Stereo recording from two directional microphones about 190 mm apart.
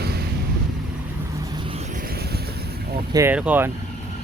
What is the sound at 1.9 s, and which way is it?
Vehicle, 50° right (ahead or behind).